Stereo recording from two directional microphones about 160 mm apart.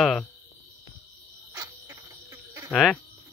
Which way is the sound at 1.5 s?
15° right (ahead or behind).